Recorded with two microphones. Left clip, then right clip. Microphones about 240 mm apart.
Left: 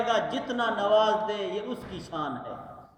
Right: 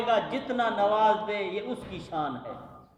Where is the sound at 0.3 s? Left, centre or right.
Centre.